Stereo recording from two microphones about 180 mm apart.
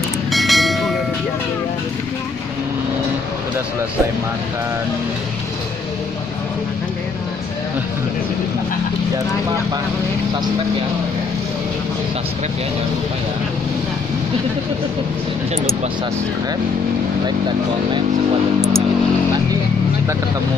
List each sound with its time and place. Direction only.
0.3 s train: centre (ahead or behind)